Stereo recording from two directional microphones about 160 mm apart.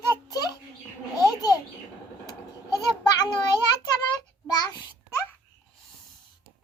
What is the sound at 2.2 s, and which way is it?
Goat, 25° left (ahead or behind).